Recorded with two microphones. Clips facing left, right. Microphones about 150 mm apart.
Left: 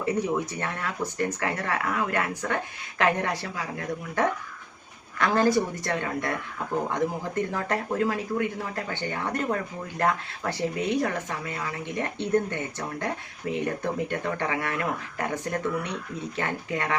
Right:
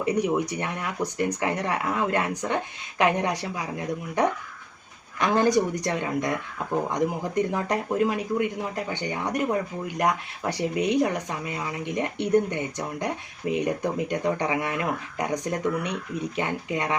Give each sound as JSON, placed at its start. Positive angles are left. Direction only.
{"t": 0.0, "sound": "speech", "side_deg": -15}